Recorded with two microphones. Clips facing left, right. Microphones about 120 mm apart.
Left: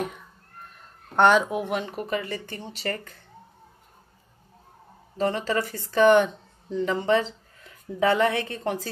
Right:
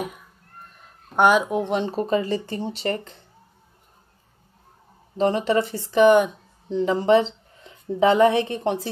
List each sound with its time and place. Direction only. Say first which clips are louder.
0.0 s a sound: even; 10° right (ahead or behind)
1.1 s speech: right 1 dB; 10° right (ahead or behind)
1.5 s speech: right 5 dB; 25° right (ahead or behind)
5.1 s speech: right 5 dB; 20° right (ahead or behind)
6.8 s a woman's voice: right 5 dB; 25° right (ahead or behind)